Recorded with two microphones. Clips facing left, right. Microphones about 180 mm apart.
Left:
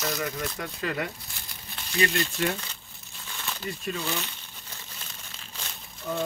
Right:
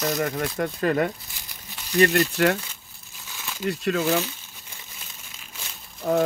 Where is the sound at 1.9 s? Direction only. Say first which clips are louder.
Right 8 dB; 65° right (ahead or behind).